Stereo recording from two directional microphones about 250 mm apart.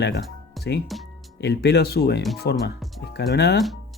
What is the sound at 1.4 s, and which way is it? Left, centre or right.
Speech, left.